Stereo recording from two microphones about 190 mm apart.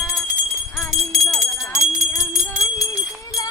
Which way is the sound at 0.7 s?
Centre (ahead or behind).